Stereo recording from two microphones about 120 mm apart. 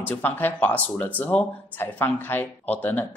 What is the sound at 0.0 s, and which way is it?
Speech, 15° left (ahead or behind).